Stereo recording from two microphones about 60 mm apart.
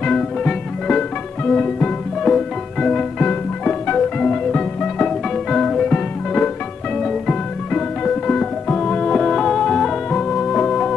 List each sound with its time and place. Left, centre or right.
0.0 s music: centre
1.4 s music: left
2.2 s music: centre
5.5 s music: centre
7.0 s music: centre